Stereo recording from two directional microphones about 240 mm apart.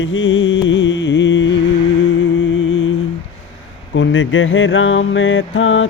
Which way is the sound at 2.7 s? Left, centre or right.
Left.